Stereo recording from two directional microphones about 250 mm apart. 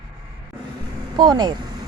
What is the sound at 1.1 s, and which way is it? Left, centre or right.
Speech, centre.